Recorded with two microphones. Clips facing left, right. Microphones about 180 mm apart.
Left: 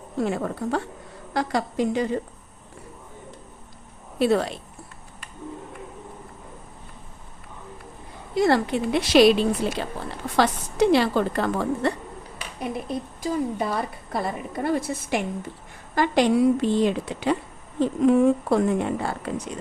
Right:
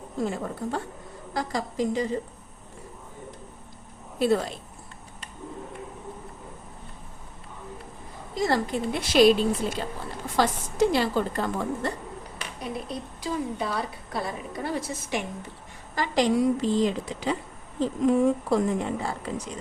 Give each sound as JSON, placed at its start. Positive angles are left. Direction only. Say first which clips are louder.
{"t": 0.2, "sound": "a woman's voice", "louder": "left 4 dB", "side_deg": 70}
{"t": 4.2, "sound": "a woman's voice", "louder": "left 2 dB", "side_deg": 75}
{"t": 8.4, "sound": "a woman's voice", "louder": "left 5 dB", "side_deg": 65}
{"t": 12.5, "sound": "a woman's voice", "louder": "left 5 dB", "side_deg": 55}